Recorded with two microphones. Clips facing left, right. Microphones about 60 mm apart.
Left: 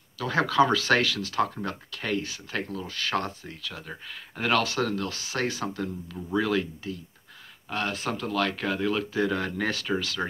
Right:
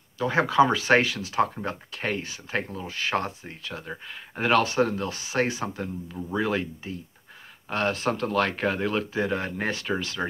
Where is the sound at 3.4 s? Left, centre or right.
Right.